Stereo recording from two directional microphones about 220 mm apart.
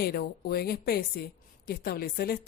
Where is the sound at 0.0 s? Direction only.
45° left (ahead or behind).